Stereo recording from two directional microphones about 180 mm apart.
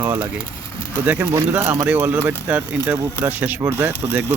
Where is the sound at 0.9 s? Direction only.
10° right (ahead or behind).